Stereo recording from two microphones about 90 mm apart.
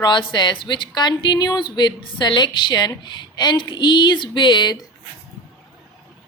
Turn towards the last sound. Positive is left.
turn(degrees=55)  # may be behind; listen again after turning